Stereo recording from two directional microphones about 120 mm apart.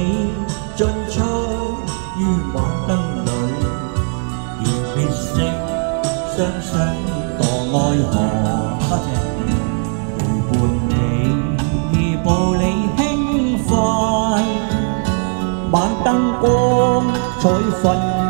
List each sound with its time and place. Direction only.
0.7 s music: 35° right (ahead or behind)
11.9 s music: 20° left (ahead or behind)
13.7 s music: 5° right (ahead or behind); by 15.1 s 25° right (ahead or behind)
15.7 s music: 40° right (ahead or behind); by 17.9 s 55° right (ahead or behind)